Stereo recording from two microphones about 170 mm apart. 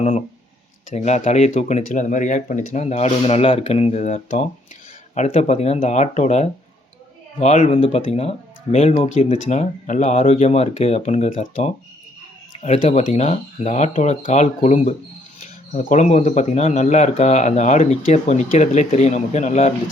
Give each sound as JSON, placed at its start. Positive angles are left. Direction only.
{"t": 0.9, "sound": "speech", "side_deg": 40}